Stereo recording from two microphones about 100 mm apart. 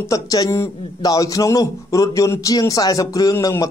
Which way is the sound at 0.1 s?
35° left (ahead or behind).